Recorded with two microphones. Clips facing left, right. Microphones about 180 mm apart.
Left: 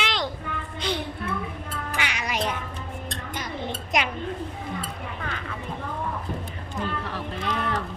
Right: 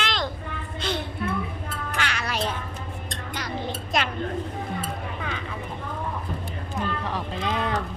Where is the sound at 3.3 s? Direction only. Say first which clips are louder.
Right 2 dB; 20° left (ahead or behind).